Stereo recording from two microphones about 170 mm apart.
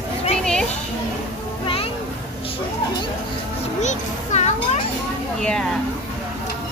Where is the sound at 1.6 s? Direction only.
35° left (ahead or behind).